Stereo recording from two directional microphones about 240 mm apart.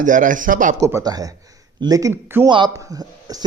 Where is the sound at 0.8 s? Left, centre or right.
Centre.